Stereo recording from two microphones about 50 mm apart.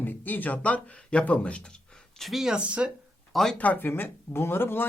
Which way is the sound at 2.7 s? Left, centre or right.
Right.